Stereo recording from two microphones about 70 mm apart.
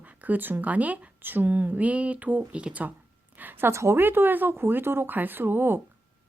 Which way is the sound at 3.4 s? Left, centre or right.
Right.